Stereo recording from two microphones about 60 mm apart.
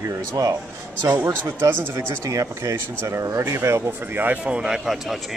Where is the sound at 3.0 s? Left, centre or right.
Right.